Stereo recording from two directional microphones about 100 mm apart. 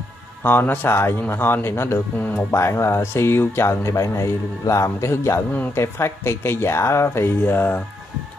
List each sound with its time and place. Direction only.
0.4 s a man's voice: 20° left (ahead or behind)